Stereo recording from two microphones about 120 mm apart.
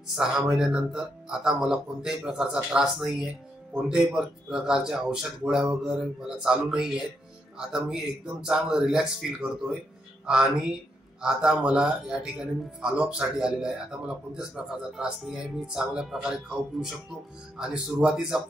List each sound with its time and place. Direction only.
0.1 s a man's voice: 5° right (ahead or behind)
11.1 s a man's voice: 5° right (ahead or behind)